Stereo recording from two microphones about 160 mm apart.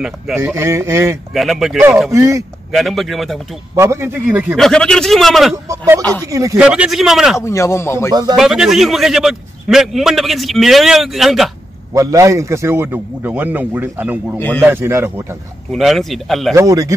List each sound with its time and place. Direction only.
0.6 s a man's voice: 15° right (ahead or behind)
1.3 s a man's voice: centre (ahead or behind)
1.8 s a man's voice: 10° right (ahead or behind)
2.7 s a man's voice: centre (ahead or behind)
3.7 s a man's voice: 15° right (ahead or behind)
4.6 s a man's voice: 5° left (ahead or behind)
5.7 s speech: 20° right (ahead or behind)
6.6 s a man's voice: 5° right (ahead or behind)
7.3 s a man's voice: 15° left (ahead or behind)
8.1 s speech: 25° right (ahead or behind)
8.4 s a man's voice: centre (ahead or behind)
11.9 s a man's voice: 20° right (ahead or behind)
15.7 s a man's voice: centre (ahead or behind)
16.5 s speech: 20° right (ahead or behind)